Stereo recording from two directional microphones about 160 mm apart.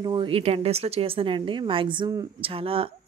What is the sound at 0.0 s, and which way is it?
Speech, 30° right (ahead or behind).